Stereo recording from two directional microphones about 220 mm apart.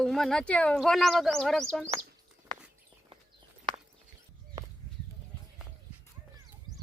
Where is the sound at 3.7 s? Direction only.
20° right (ahead or behind).